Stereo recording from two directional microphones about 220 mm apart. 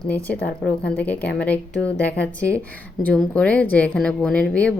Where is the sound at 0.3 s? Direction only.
5° left (ahead or behind).